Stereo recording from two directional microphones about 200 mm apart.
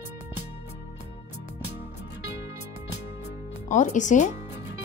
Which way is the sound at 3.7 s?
35° left (ahead or behind).